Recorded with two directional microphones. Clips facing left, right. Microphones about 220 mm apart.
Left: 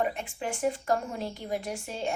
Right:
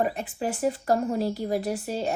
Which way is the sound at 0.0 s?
40° right (ahead or behind).